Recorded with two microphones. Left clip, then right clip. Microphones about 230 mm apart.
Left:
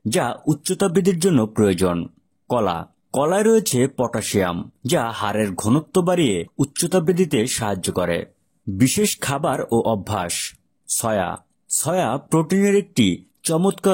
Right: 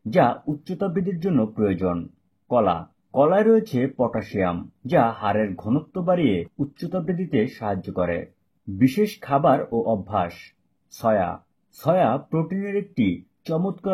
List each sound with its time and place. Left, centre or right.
0.1 s speech: left